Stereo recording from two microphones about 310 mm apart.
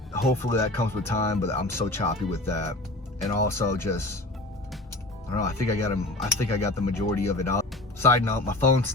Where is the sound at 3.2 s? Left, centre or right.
Centre.